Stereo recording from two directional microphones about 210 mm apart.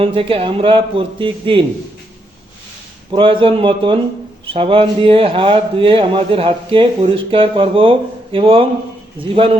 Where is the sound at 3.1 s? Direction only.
25° right (ahead or behind).